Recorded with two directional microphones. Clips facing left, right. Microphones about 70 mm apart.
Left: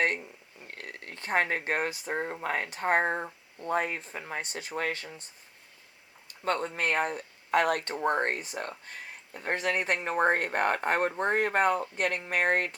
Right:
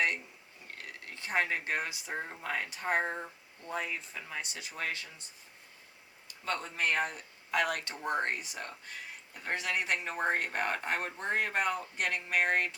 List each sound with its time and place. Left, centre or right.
0.7 s speech: left
6.2 s speech: left